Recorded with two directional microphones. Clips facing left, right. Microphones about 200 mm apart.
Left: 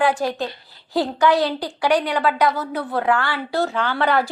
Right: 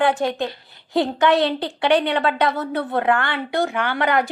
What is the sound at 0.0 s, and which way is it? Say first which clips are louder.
Speech: right 1 dB; 20° right (ahead or behind).